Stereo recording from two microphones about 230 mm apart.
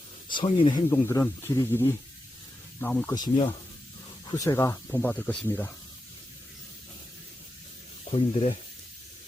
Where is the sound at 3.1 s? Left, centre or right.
Centre.